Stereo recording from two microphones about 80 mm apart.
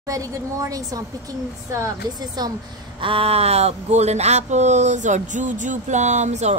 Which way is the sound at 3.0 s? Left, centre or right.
Right.